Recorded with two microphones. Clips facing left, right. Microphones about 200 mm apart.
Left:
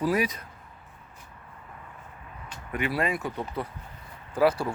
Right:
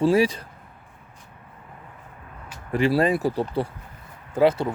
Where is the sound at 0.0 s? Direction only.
30° right (ahead or behind).